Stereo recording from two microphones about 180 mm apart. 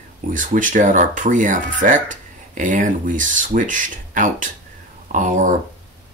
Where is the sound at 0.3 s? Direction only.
45° right (ahead or behind).